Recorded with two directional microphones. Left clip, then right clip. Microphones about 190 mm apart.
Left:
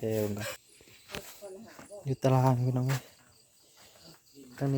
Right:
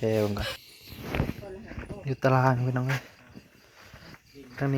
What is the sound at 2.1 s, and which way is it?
Speech, 15° left (ahead or behind).